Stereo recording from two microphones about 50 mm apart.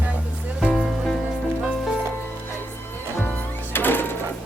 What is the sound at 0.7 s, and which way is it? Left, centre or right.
Music, centre.